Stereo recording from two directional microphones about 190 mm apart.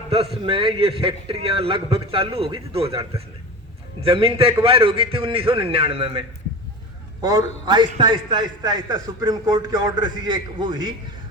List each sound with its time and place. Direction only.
0.1 s a man's voice: 30° right (ahead or behind)
4.0 s a man's voice: 30° right (ahead or behind)
7.2 s a man's voice: 20° right (ahead or behind)